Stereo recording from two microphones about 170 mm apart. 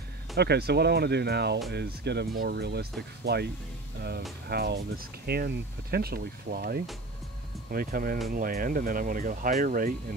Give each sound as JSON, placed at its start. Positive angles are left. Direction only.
{"t": 0.4, "sound": "speech", "side_deg": -75}
{"t": 4.5, "sound": "speech", "side_deg": -70}